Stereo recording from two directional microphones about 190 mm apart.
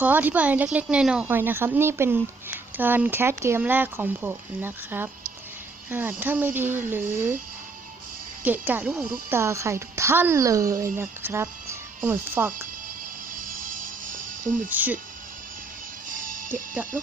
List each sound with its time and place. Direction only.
0.0 s speech: 10° right (ahead or behind)
8.4 s speech: 10° right (ahead or behind)
13.3 s music: 45° right (ahead or behind)
14.7 s speech: 10° right (ahead or behind)
16.0 s music: 45° right (ahead or behind)